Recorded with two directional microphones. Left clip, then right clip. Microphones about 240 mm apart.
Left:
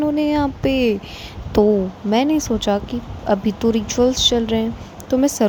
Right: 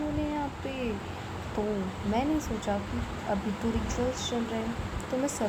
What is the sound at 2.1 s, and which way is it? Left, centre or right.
Speech, left.